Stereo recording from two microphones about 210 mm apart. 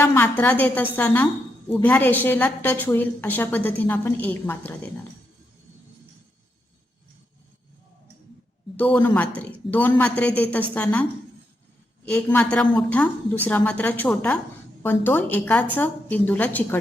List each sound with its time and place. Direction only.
0.0 s a woman's voice: 10° left (ahead or behind)
8.7 s a woman's voice: 10° left (ahead or behind)
12.1 s a woman's voice: 5° left (ahead or behind)